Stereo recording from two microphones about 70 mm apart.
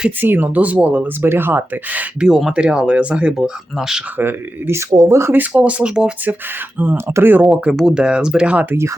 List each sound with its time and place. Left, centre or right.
0.2 s speech: right
2.2 s speech: centre
4.2 s speech: right
4.9 s speech: right
5.3 s speech: right
6.7 s speech: right
7.7 s speech: centre
7.9 s speech: centre